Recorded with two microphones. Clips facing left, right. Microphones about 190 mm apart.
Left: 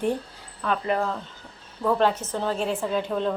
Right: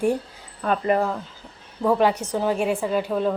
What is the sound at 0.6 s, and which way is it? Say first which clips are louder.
Speech: right 4 dB; 45° right (ahead or behind).